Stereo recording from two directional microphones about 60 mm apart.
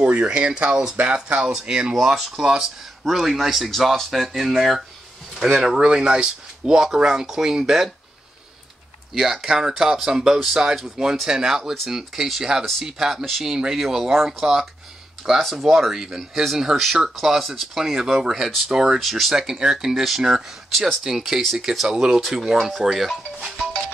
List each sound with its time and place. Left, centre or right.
0.0 s speech: centre
2.0 s speech: centre
9.1 s speech: centre
21.8 s speech: centre